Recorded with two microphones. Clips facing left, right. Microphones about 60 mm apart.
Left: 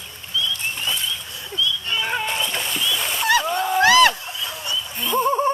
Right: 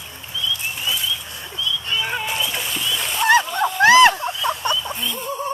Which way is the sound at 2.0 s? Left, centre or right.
Centre.